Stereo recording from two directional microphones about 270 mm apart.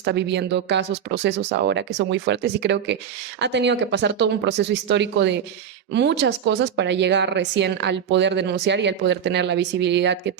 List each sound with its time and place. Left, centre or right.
0.0 s speech: right